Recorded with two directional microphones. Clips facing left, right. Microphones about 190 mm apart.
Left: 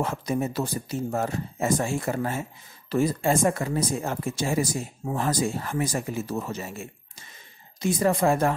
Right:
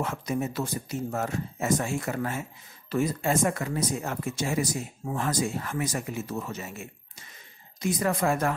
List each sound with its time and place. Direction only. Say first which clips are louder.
0.0 s speech: left 3 dB; 35° left (ahead or behind)